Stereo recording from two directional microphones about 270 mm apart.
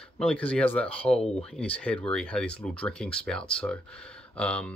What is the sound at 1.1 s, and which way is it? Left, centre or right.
Speech, left.